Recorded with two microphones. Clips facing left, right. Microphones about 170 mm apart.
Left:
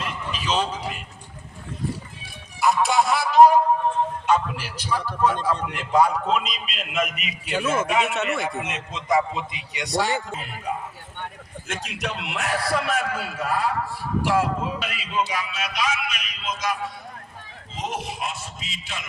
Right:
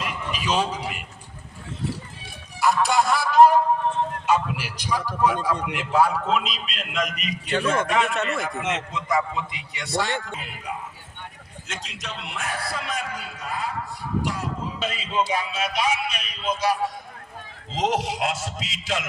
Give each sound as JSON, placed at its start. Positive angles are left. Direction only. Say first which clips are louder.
{"t": 0.0, "sound": "a sound", "louder": "right 1 dB", "side_deg": -10}
{"t": 2.6, "sound": "a man's voice", "louder": "left 1 dB", "side_deg": 0}
{"t": 4.3, "sound": "a man's voice", "louder": "even", "side_deg": -10}
{"t": 8.9, "sound": "a man's voice", "louder": "left 7 dB", "side_deg": 20}
{"t": 11.7, "sound": "a man's voice", "louder": "left 6 dB", "side_deg": 55}
{"t": 14.3, "sound": "speech", "louder": "left 7 dB", "side_deg": 90}
{"t": 14.8, "sound": "a sound", "louder": "right 1 dB", "side_deg": -25}
{"t": 17.7, "sound": "a man's voice", "louder": "right 6 dB", "side_deg": -90}